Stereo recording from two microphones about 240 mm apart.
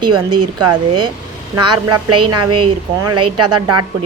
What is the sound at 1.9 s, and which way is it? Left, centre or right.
A woman's voice, right.